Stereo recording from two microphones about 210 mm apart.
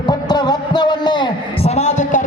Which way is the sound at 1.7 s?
35° left (ahead or behind).